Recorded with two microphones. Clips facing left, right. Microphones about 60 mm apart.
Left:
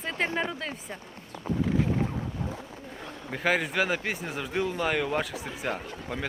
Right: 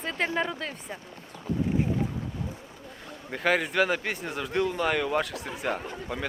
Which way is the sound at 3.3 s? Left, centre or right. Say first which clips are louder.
Right 1 dB; centre.